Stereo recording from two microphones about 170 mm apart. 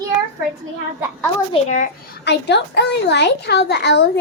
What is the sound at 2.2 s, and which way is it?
A woman's voice, 80° left.